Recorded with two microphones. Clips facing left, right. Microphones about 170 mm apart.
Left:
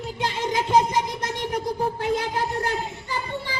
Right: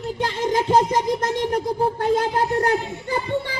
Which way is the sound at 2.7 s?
55° right (ahead or behind).